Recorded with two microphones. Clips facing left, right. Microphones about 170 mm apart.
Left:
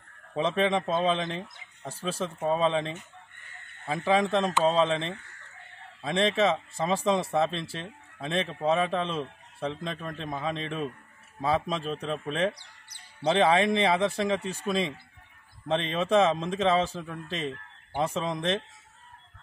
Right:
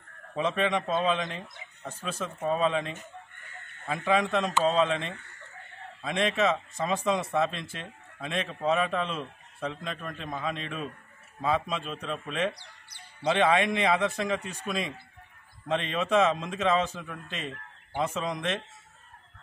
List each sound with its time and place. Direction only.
0.4 s speech: 30° left (ahead or behind)
1.8 s speech: 10° left (ahead or behind)
2.0 s a man's voice: 30° left (ahead or behind)
3.9 s a man's voice: 30° left (ahead or behind)